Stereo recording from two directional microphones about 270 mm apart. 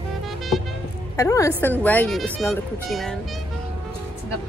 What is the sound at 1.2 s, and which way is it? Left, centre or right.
Speech, centre.